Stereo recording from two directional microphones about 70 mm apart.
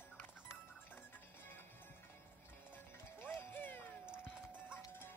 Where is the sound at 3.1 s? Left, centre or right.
Left.